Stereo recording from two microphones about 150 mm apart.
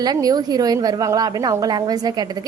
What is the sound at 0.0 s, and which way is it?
A woman's voice, 25° right (ahead or behind).